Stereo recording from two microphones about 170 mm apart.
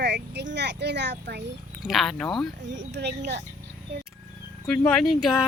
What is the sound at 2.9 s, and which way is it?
Speech, 75° right (ahead or behind).